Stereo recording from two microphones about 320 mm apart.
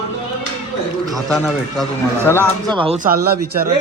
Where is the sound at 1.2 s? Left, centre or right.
Centre.